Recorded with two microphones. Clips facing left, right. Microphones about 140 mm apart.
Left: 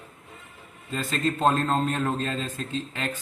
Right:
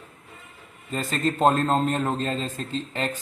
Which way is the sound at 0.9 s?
40° right (ahead or behind).